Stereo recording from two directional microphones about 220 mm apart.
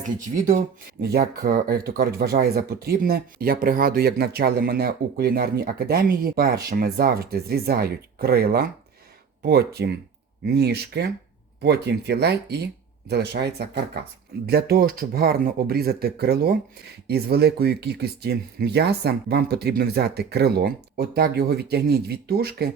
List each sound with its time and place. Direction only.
1.0 s speech: 45° right (ahead or behind)